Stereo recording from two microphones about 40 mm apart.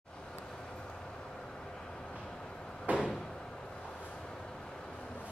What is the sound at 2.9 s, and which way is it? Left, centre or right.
Door, right.